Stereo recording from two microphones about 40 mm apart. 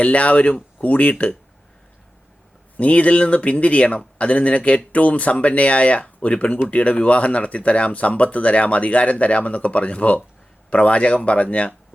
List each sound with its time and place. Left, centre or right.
0.0 s speech: left
2.7 s speech: left